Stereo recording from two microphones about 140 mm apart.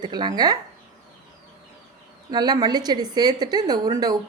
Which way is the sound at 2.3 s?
30° right (ahead or behind).